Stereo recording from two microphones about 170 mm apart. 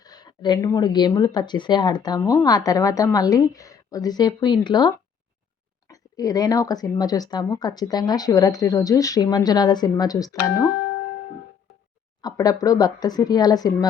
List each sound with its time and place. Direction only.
0.0 s speech: 25° left (ahead or behind)
12.2 s speech: 20° left (ahead or behind)